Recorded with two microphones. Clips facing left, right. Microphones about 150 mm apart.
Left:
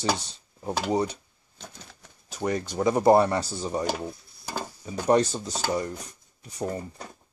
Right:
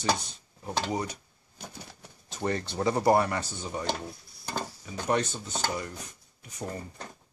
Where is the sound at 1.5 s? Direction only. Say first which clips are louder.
Right 2 dB; 10° right (ahead or behind).